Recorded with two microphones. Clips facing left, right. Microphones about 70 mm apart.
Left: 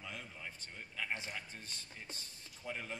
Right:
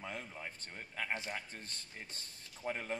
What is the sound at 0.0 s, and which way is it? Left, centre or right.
A man's voice, right.